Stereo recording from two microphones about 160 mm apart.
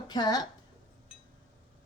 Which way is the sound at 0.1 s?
25° left (ahead or behind).